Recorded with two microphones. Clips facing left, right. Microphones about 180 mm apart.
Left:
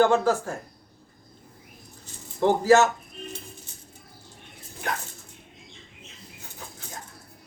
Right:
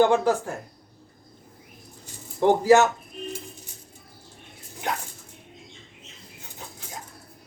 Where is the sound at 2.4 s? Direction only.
15° right (ahead or behind).